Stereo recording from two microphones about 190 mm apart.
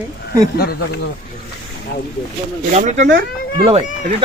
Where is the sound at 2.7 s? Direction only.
40° right (ahead or behind).